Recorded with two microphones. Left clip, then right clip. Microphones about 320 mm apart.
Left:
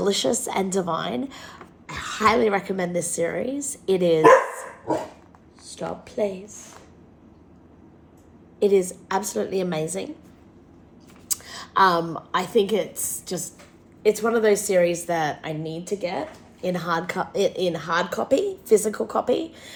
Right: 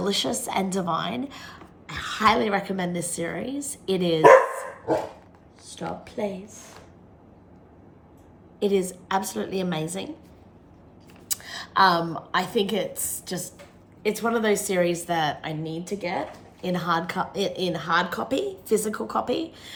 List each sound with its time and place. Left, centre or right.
0.0 s a woman's voice: centre
1.9 s a sound: right
2.1 s a woman's voice: centre
5.7 s a woman's voice: centre
8.6 s a woman's voice: centre
11.3 s a sound: centre
12.3 s a woman's voice: centre